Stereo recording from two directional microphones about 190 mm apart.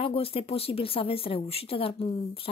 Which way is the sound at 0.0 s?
30° left (ahead or behind).